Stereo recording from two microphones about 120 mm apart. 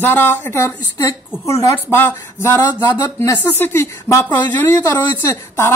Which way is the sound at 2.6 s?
30° left (ahead or behind).